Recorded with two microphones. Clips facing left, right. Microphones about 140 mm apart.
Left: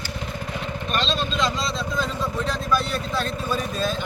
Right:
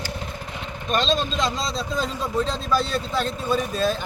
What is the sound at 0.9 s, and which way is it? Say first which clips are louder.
Speech: right 3 dB; 40° right (ahead or behind).